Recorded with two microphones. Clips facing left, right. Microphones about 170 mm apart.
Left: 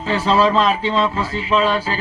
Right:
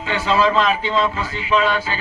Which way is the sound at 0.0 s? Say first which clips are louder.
Left 2 dB; 35° left (ahead or behind).